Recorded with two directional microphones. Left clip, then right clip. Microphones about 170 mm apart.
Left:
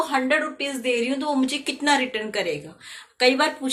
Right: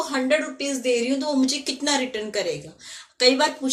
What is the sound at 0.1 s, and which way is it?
A woman's voice, 10° left (ahead or behind).